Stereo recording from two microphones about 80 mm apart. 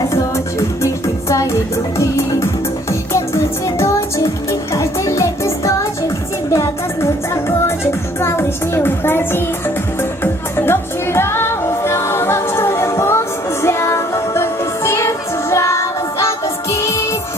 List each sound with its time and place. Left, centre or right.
0.1 s music: left